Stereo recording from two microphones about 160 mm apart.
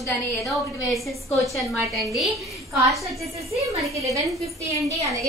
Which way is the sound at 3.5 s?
20° right (ahead or behind).